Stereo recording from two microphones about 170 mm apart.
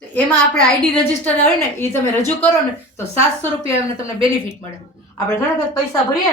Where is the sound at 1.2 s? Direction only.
10° left (ahead or behind).